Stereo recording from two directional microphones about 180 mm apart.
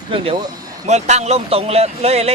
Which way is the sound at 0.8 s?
40° right (ahead or behind).